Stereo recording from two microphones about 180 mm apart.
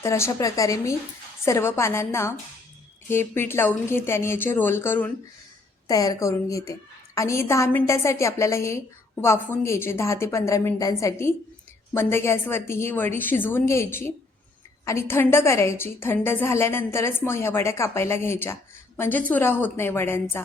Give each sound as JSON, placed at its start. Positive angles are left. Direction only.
{"t": 0.0, "sound": "a woman's voice", "side_deg": 15}